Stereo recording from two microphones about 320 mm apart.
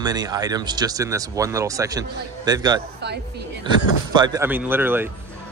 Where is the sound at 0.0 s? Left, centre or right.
Centre.